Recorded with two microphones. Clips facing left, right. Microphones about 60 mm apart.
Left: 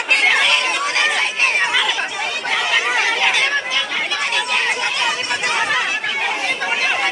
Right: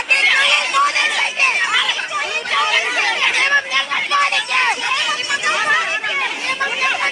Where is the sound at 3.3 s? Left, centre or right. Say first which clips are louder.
Right 3 dB; right.